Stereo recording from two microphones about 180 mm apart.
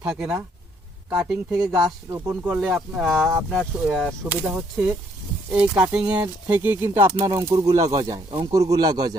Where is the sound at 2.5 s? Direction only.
Centre (ahead or behind).